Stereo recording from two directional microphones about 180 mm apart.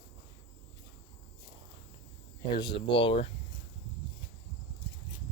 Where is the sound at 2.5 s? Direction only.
25° left (ahead or behind).